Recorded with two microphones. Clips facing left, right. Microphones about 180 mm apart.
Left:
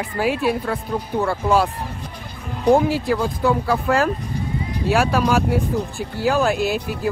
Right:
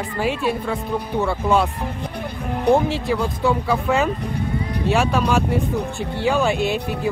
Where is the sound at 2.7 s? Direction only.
Centre (ahead or behind).